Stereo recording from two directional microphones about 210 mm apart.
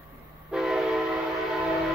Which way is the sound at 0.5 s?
Centre (ahead or behind).